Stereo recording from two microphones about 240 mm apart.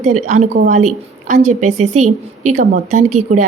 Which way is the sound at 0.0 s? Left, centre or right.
Right.